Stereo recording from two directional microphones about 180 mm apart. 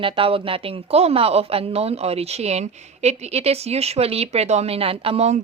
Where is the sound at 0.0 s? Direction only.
30° right (ahead or behind).